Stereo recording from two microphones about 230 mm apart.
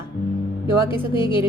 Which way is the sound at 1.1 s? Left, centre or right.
Left.